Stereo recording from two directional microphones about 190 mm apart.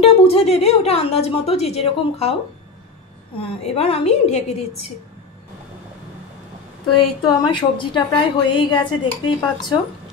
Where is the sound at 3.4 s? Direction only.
30° left (ahead or behind).